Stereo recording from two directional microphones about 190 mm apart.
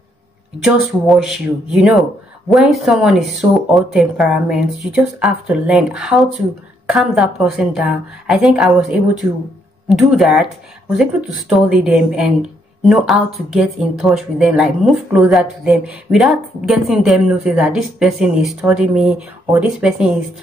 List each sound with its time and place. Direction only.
0.7 s speech: centre (ahead or behind)